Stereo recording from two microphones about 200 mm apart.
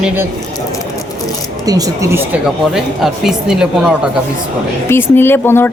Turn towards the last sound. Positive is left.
turn(degrees=10)  # may be behind; listen again after turning